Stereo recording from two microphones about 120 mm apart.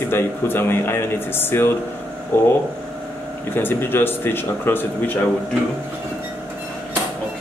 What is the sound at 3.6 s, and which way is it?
Speech, 20° left (ahead or behind).